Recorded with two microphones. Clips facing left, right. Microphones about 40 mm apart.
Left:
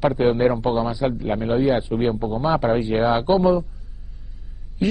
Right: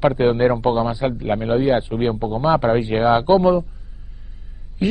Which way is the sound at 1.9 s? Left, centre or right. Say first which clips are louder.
Right 1 dB; centre.